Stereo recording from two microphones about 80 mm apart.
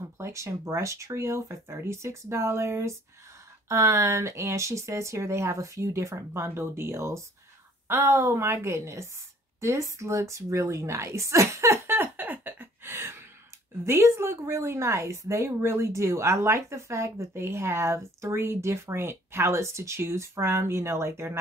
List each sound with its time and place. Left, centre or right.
0.0 s speech: right
9.6 s a sound: right
13.8 s speech: right